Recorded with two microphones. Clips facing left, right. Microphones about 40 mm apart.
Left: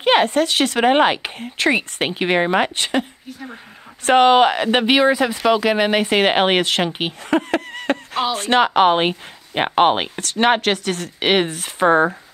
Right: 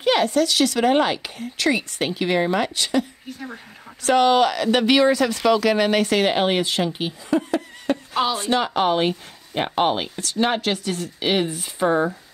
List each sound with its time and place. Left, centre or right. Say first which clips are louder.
0.0 s speech: left 3 dB; left
6.1 s speech: left 4 dB; left